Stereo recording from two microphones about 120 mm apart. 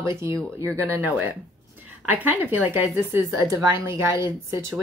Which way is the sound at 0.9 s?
15° right (ahead or behind).